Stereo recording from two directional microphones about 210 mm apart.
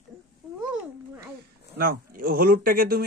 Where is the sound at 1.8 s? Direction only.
45° right (ahead or behind).